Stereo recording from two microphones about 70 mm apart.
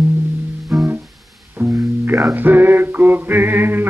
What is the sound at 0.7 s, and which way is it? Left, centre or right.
Music, right.